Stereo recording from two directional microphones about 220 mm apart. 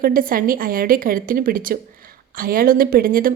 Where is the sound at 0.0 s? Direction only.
40° right (ahead or behind).